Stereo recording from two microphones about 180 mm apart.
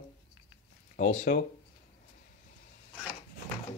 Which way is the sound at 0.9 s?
40° left (ahead or behind).